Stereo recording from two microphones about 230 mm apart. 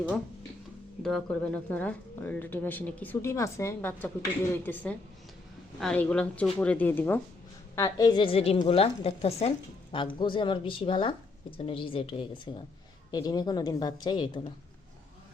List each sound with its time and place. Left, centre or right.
1.0 s a woman's voice: centre